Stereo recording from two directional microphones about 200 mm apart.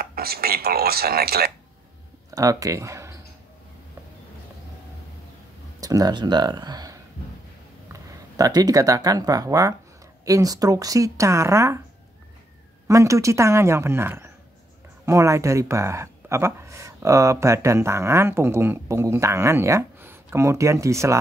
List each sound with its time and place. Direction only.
0.0 s speech: 50° right (ahead or behind)
2.3 s speech: 15° right (ahead or behind)
5.8 s speech: 20° right (ahead or behind)
12.8 s speech: 15° right (ahead or behind)